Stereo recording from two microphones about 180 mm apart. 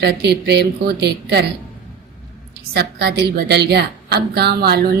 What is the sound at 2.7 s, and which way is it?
A woman's voice, 65° right (ahead or behind).